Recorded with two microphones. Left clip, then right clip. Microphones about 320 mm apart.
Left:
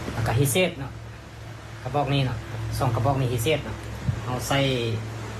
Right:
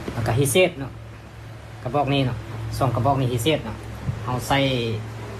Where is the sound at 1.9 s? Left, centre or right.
Right.